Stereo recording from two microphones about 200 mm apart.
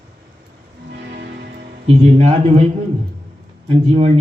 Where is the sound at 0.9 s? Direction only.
55° right (ahead or behind).